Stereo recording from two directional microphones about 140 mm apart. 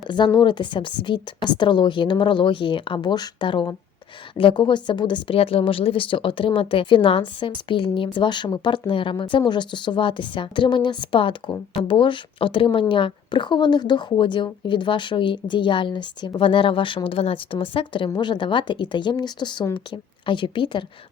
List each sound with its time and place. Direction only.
0.3 s a woman's voice: 35° left (ahead or behind)